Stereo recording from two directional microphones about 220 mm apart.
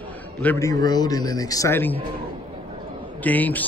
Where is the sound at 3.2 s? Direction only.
5° left (ahead or behind).